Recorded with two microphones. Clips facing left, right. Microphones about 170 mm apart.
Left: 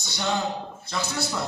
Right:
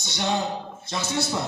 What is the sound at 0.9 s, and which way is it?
Speech, 25° right (ahead or behind).